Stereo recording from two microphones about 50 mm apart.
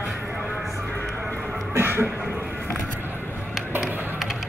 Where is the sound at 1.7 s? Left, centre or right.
Right.